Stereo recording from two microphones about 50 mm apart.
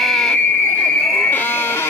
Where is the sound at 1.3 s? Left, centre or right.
Left.